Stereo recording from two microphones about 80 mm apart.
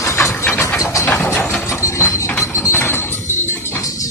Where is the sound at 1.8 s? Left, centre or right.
Left.